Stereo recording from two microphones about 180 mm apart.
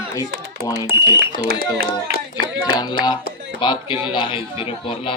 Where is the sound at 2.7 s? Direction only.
20° left (ahead or behind).